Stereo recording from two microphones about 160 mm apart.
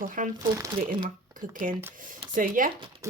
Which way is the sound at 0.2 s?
55° right (ahead or behind).